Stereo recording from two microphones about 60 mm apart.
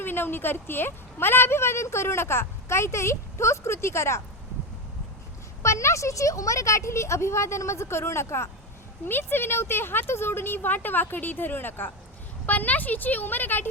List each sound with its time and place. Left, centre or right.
0.0 s a woman's voice: left
5.6 s a woman's voice: left
9.0 s speech: left